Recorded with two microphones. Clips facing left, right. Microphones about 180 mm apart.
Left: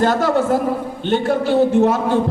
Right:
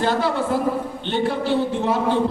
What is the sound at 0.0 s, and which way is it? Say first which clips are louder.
A man's voice: left 5 dB; 45° left (ahead or behind).